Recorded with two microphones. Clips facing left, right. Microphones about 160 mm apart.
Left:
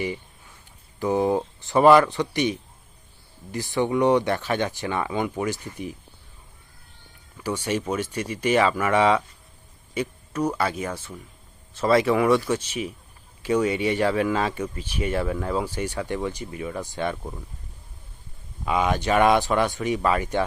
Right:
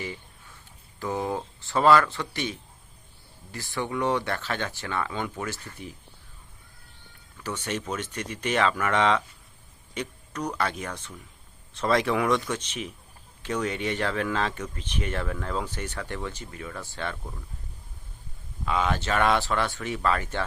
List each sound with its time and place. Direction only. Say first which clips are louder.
0.9 s speech: left 7 dB; 20° left (ahead or behind)
7.3 s speech: left 6 dB; 10° left (ahead or behind)
18.6 s speech: left 4 dB; 15° left (ahead or behind)